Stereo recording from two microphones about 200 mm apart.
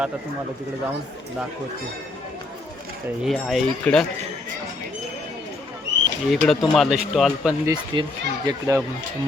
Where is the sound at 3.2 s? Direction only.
5° left (ahead or behind).